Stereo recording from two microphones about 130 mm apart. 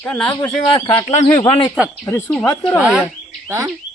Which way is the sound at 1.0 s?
65° left (ahead or behind).